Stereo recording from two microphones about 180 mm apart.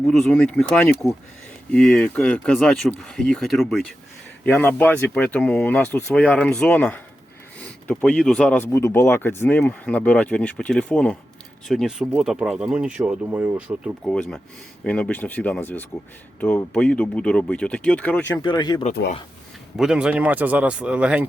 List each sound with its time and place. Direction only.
0.1 s speech: 5° left (ahead or behind)
18.4 s speech: 25° left (ahead or behind)
19.7 s speech: centre (ahead or behind)